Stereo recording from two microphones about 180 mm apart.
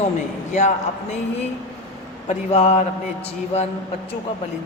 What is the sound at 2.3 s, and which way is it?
Speech, 35° left (ahead or behind).